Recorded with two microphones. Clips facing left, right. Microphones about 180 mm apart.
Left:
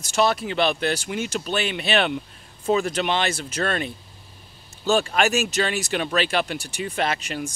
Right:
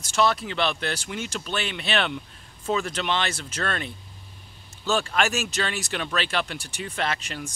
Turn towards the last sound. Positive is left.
turn(degrees=15)  # may be behind; listen again after turning